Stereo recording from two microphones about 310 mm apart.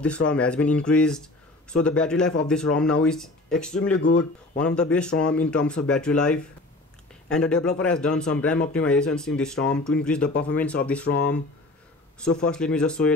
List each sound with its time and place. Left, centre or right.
0.0 s speech: centre
11.1 s speech: left
12.2 s speech: centre